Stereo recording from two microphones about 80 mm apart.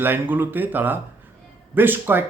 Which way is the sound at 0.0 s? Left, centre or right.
Right.